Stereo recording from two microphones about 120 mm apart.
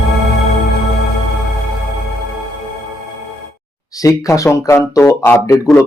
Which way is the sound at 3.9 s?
30° left (ahead or behind).